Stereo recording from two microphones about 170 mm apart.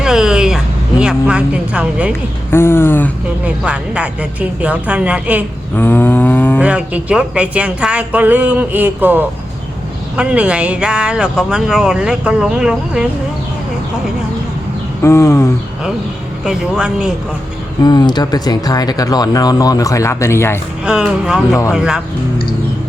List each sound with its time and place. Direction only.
0.0 s vehicle: 5° right (ahead or behind)
2.5 s a sound: 15° left (ahead or behind)
3.4 s speech: 5° right (ahead or behind)
5.7 s a sound: 10° left (ahead or behind)
6.6 s speech: 5° right (ahead or behind)
15.0 s a sound: 15° left (ahead or behind)
16.4 s speech: 5° right (ahead or behind)
17.8 s speech: 25° left (ahead or behind)
20.8 s speech: 5° right (ahead or behind)